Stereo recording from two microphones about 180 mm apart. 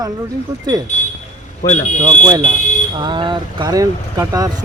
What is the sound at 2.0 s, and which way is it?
Speech, 25° right (ahead or behind).